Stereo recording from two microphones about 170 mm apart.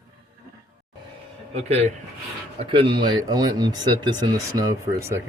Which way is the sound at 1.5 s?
40° right (ahead or behind).